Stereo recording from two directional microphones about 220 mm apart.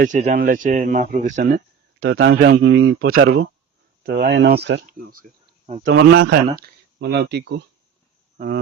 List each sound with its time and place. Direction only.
0.0 s speech: 35° right (ahead or behind)
2.0 s speech: 55° right (ahead or behind)
3.1 s speech: 45° right (ahead or behind)
5.9 s speech: 55° right (ahead or behind)